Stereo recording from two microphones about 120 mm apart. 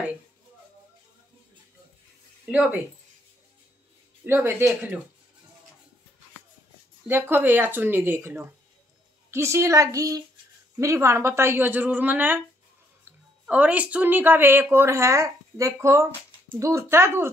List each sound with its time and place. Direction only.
2.5 s a woman's voice: 10° right (ahead or behind)
4.2 s a woman's voice: 15° right (ahead or behind)
7.1 s a woman's voice: 20° right (ahead or behind)